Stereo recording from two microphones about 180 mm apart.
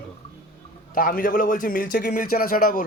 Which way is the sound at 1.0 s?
50° left (ahead or behind).